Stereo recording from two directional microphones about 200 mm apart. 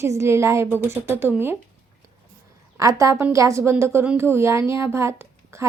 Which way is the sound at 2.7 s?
15° right (ahead or behind).